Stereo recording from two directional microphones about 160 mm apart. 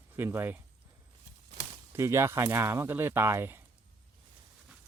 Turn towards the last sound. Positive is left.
turn(degrees=-15)  # may be behind; listen again after turning